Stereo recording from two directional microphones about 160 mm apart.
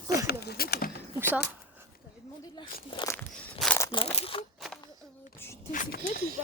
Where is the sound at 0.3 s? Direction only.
80° left.